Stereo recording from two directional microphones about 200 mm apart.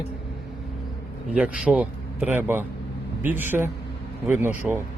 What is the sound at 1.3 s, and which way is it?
Speech, 5° right (ahead or behind).